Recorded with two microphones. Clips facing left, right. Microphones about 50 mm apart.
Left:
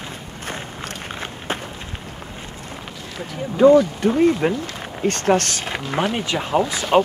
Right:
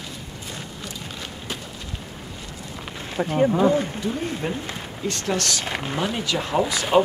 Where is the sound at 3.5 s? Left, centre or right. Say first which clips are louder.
Left 7 dB; left.